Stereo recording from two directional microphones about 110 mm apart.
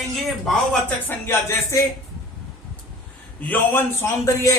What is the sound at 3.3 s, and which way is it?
A man's voice, 15° left (ahead or behind).